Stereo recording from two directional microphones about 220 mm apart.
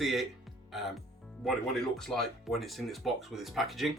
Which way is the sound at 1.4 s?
Centre (ahead or behind).